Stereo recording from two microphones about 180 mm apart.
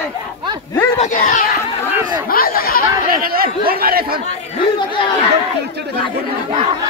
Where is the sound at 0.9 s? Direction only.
45° left (ahead or behind).